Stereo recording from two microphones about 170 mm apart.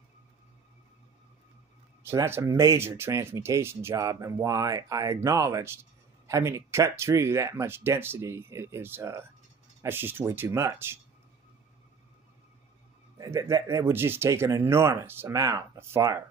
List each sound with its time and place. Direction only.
2.0 s speech: 15° right (ahead or behind)
13.2 s speech: 20° right (ahead or behind)